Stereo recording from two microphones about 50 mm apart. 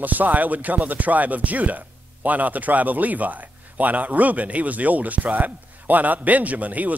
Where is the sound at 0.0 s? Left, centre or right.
Right.